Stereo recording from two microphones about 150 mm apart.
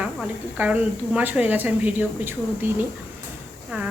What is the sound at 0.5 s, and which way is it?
A woman's voice, 10° right (ahead or behind).